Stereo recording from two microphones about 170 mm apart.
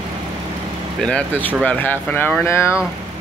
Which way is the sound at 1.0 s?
10° left (ahead or behind).